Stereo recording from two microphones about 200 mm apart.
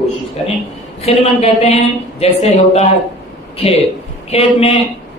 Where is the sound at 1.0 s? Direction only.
30° left (ahead or behind).